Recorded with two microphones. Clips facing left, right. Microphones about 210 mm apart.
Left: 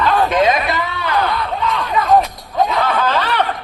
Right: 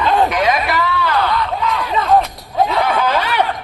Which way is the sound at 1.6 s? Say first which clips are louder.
Even; 5° right (ahead or behind).